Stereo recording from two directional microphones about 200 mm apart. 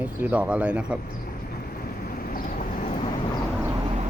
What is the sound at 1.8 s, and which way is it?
Vehicle, 45° left (ahead or behind).